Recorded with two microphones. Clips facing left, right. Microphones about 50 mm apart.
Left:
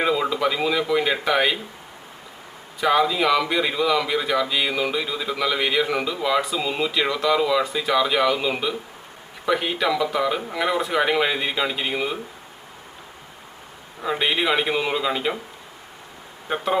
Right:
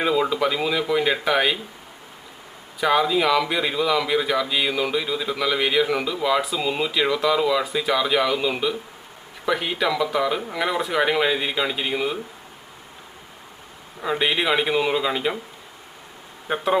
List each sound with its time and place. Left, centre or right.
0.0 s speech: centre
2.8 s speech: centre
14.0 s speech: centre
16.5 s a man's voice: centre